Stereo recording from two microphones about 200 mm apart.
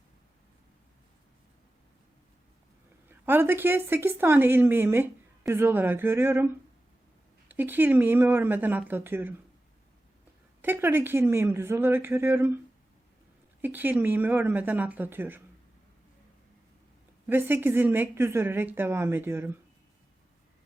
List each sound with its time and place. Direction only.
3.1 s a woman's voice: 10° right (ahead or behind)
10.6 s a woman's voice: 10° right (ahead or behind)
13.6 s a woman's voice: 10° right (ahead or behind)
17.2 s a woman's voice: 10° right (ahead or behind)